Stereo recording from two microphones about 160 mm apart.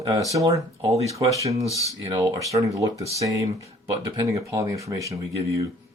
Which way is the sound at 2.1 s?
20° right (ahead or behind).